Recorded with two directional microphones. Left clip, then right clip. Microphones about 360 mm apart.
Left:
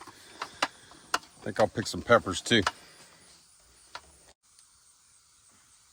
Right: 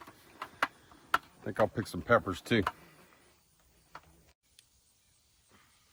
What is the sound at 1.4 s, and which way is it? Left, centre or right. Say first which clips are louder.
Speech: left 5 dB; left.